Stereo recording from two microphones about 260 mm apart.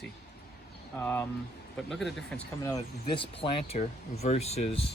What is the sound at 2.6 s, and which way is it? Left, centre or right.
Speech, centre.